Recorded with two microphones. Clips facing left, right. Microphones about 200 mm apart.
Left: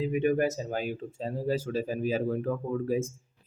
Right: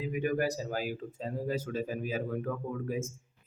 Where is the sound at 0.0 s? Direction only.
25° left (ahead or behind).